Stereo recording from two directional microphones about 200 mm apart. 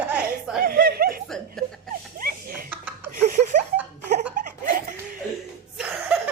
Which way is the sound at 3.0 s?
40° right (ahead or behind).